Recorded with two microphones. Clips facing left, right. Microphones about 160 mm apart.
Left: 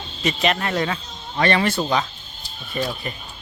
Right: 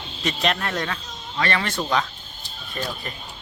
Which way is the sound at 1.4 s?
20° left (ahead or behind).